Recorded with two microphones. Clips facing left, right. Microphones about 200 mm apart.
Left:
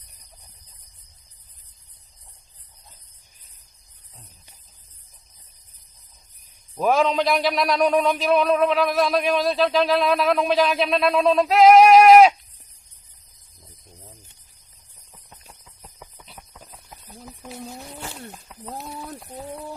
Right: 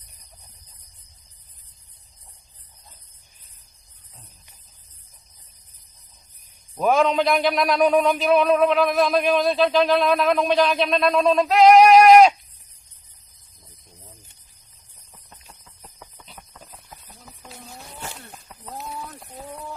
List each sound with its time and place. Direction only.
6.7 s speech: centre (ahead or behind)
15.1 s clip-clop: 5° left (ahead or behind)